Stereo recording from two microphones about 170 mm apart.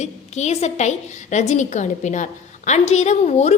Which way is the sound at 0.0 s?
40° left (ahead or behind).